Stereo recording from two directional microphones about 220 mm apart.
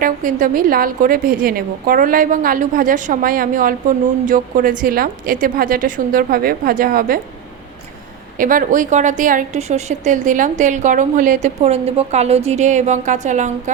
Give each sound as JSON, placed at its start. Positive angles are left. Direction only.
{"t": 0.0, "sound": "a woman's voice", "side_deg": -35}
{"t": 8.4, "sound": "a woman's voice", "side_deg": -40}